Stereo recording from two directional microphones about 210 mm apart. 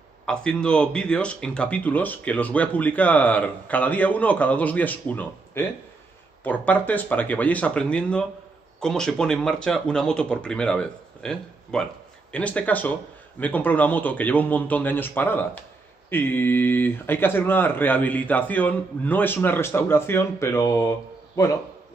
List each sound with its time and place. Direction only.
0.3 s speech: 5° left (ahead or behind)